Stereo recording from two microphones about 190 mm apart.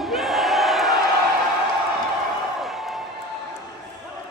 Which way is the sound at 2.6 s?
Centre (ahead or behind).